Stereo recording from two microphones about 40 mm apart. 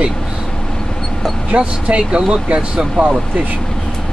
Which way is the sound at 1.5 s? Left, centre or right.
Right.